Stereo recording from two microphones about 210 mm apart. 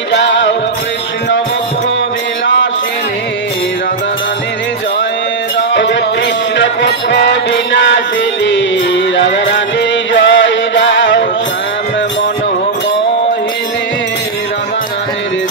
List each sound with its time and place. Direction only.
0.1 s music: 60° left (ahead or behind)
2.4 s music: 65° left (ahead or behind)
5.6 s music: 60° left (ahead or behind)